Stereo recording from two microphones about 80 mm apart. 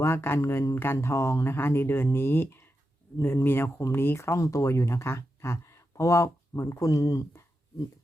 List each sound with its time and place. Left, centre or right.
0.0 s speech: left